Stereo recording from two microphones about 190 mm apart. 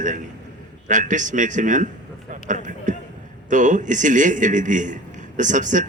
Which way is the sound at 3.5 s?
40° right (ahead or behind).